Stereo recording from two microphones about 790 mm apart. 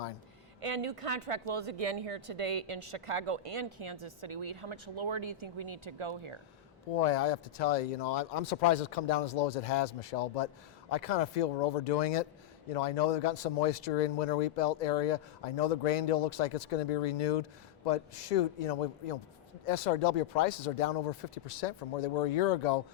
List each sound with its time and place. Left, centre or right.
0.6 s speech: right
6.9 s speech: left